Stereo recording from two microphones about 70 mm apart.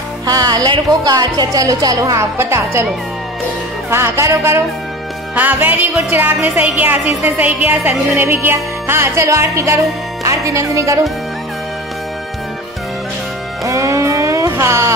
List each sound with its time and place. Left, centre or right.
0.3 s speech: right
2.3 s music: right
3.9 s music: right
5.3 s a woman's voice: right
8.2 s music: right
9.2 s speech: right
13.7 s music: right